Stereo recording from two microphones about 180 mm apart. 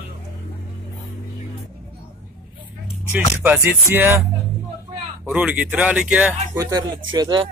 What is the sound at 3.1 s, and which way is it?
Speech, 10° right (ahead or behind).